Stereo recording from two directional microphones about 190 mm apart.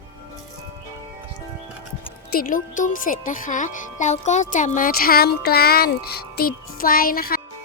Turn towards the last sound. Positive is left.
turn(degrees=50)  # may be behind; listen again after turning